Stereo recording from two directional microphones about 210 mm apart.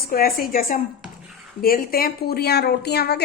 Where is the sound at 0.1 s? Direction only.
45° left (ahead or behind).